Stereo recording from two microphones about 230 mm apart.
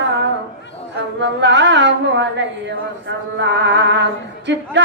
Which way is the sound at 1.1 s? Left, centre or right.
Right.